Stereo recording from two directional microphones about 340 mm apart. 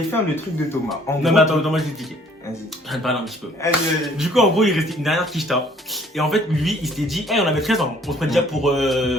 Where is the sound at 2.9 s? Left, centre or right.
Centre.